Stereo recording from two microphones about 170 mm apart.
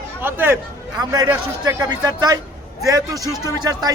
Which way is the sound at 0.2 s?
10° right (ahead or behind).